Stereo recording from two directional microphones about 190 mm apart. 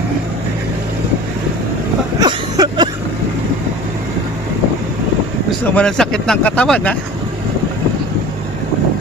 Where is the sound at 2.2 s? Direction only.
20° right (ahead or behind).